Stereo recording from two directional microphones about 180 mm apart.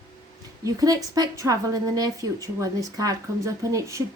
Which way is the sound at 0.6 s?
20° right (ahead or behind).